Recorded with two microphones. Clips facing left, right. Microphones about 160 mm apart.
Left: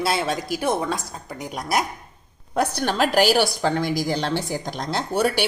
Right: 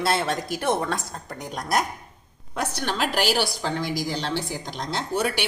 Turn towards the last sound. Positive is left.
turn(degrees=40)  # may be behind; listen again after turning